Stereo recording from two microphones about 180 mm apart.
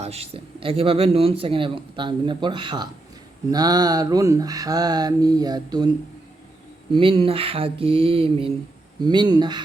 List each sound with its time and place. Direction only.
0.0 s speech: 35° right (ahead or behind)
6.9 s a sound: 30° right (ahead or behind)
9.0 s speech: 25° right (ahead or behind)